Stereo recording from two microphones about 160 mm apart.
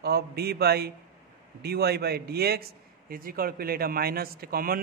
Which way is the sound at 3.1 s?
65° right (ahead or behind).